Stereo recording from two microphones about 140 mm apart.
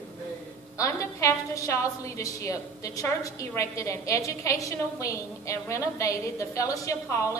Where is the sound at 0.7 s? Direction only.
25° left (ahead or behind).